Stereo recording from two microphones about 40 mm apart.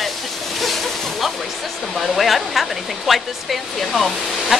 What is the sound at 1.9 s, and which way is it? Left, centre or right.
Speech, centre.